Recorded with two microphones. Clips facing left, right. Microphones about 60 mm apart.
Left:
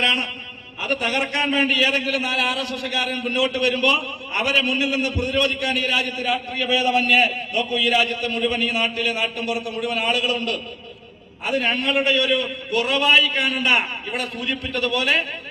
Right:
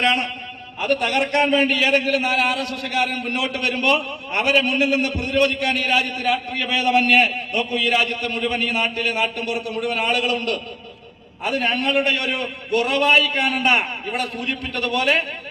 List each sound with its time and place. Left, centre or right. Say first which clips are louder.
0.0 s a man's voice: right 2 dB; right
0.8 s a man's voice: right 3 dB; right